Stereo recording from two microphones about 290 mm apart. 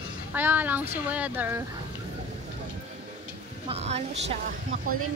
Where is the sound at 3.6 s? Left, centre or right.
Right.